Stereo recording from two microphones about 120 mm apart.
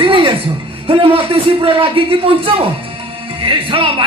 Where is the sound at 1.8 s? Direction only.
50° right (ahead or behind).